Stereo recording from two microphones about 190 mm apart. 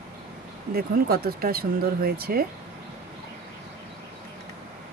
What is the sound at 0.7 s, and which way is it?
Speech, 55° right (ahead or behind).